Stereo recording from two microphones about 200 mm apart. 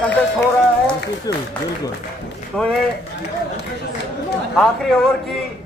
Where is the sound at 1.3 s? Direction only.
20° left (ahead or behind).